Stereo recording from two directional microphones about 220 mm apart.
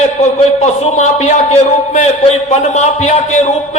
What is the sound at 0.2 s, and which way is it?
A man's voice, 30° left (ahead or behind).